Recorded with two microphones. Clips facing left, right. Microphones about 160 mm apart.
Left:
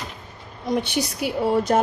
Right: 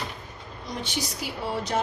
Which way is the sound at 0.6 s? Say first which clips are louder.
Left 9 dB; 55° left (ahead or behind).